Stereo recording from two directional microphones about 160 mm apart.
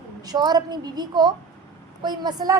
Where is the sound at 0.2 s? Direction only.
25° right (ahead or behind).